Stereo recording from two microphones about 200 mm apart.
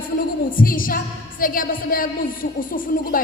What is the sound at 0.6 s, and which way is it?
A woman's voice, 45° left (ahead or behind).